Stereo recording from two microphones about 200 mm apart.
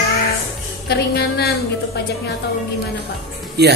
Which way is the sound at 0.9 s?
55° left (ahead or behind).